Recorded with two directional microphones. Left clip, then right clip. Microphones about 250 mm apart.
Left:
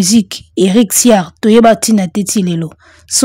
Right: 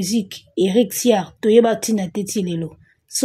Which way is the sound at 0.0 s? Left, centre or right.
Left.